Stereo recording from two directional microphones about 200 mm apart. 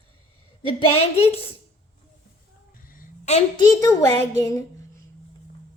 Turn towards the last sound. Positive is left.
turn(degrees=15)  # may be behind; listen again after turning